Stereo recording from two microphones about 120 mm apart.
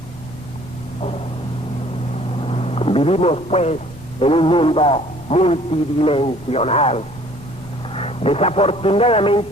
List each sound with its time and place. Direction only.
2.4 s vehicle: 55° left (ahead or behind)
4.2 s a man's voice: 50° left (ahead or behind)